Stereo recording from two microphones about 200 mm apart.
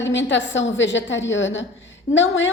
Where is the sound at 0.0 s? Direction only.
65° left (ahead or behind).